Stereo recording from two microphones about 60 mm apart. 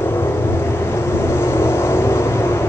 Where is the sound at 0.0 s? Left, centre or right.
Left.